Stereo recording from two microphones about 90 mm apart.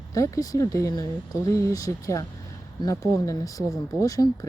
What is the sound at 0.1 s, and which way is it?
Speech, 40° left (ahead or behind).